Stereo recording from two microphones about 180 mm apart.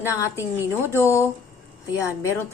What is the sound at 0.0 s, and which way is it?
A woman's voice, 15° left (ahead or behind).